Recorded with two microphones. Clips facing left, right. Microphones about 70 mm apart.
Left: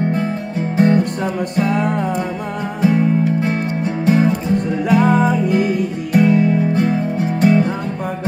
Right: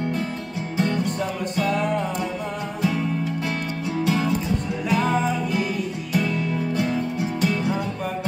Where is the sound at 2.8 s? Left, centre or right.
Left.